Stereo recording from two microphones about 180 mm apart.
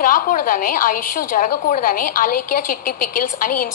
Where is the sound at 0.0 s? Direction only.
50° left (ahead or behind).